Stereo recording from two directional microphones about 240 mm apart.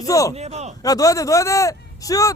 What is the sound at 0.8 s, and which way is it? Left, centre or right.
A man's voice, centre.